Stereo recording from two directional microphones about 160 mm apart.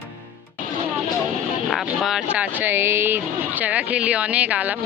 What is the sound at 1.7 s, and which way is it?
Speech, centre (ahead or behind).